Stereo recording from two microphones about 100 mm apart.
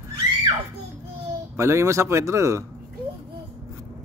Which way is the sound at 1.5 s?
30° right (ahead or behind).